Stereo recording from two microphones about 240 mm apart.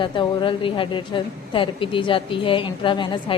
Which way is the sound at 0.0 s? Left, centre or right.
Left.